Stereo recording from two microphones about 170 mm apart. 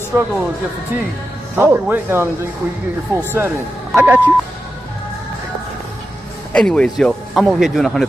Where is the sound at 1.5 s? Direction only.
15° right (ahead or behind).